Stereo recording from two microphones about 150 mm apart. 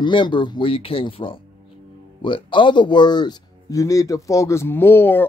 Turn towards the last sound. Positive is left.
turn(degrees=15)  # may be behind; listen again after turning